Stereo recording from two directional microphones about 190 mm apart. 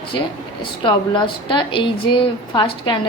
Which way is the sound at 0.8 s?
25° left (ahead or behind).